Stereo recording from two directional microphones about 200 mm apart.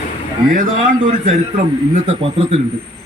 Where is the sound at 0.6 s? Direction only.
40° right (ahead or behind).